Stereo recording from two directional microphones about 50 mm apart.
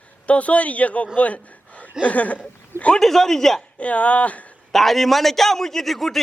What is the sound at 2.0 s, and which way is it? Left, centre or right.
Speech, left.